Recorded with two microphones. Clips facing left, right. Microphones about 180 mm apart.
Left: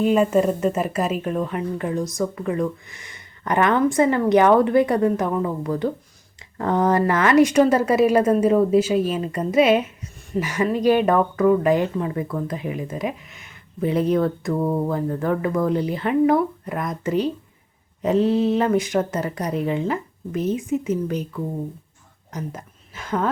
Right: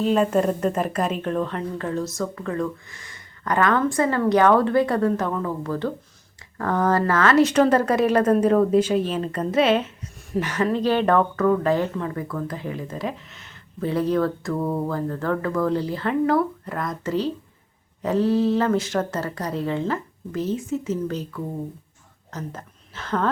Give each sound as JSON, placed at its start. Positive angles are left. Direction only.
{"t": 0.0, "sound": "speech", "side_deg": 10}